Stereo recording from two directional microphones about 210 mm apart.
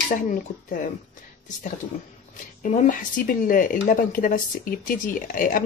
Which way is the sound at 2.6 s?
40° left (ahead or behind).